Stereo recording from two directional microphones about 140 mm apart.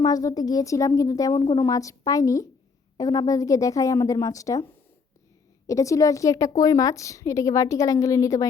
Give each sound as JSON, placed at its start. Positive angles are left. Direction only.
{"t": 0.0, "sound": "a woman's voice", "side_deg": 25}
{"t": 5.6, "sound": "a woman's voice", "side_deg": 25}